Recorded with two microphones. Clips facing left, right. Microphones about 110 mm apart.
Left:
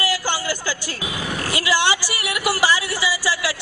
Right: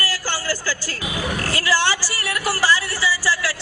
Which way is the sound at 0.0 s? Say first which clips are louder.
Left 3 dB; 15° left (ahead or behind).